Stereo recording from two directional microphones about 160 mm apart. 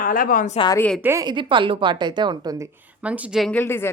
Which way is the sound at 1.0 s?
20° right (ahead or behind).